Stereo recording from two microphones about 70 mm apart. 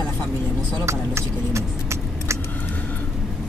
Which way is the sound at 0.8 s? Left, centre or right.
Right.